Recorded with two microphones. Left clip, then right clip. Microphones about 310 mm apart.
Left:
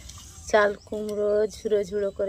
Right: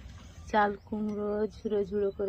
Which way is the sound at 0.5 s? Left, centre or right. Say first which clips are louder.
Left 6 dB; centre.